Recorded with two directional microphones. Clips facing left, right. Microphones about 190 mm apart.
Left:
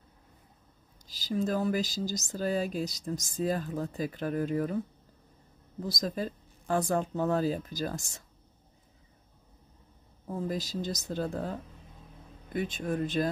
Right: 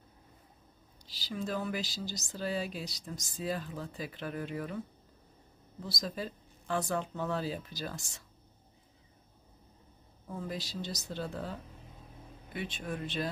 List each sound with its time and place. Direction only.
1.0 s speech: 45° left (ahead or behind)
5.8 s speech: 45° left (ahead or behind)
10.2 s speech: 40° left (ahead or behind)
12.5 s speech: 45° left (ahead or behind)